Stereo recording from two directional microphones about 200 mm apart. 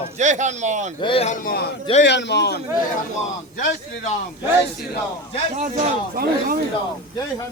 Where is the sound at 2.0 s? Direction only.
60° left (ahead or behind).